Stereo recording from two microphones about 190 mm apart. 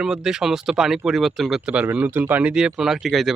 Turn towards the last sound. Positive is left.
turn(degrees=0)  # may be behind; listen again after turning